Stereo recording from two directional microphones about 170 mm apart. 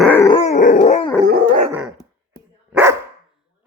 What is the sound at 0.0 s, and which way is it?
Dog, 10° left (ahead or behind).